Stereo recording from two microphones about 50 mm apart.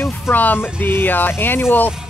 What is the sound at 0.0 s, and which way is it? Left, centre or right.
Speech, left.